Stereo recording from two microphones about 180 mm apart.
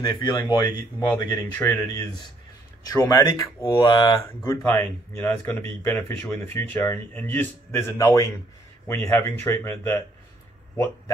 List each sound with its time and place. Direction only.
0.0 s speech: 25° left (ahead or behind)
2.8 s speech: 20° left (ahead or behind)
4.4 s speech: 10° left (ahead or behind)